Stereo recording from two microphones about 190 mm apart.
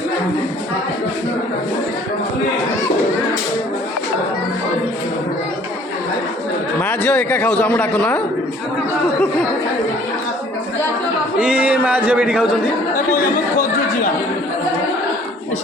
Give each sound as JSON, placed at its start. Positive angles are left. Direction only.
{"t": 6.8, "sound": "a man's voice", "side_deg": 5}
{"t": 11.3, "sound": "speech", "side_deg": -5}
{"t": 13.1, "sound": "chatter", "side_deg": 50}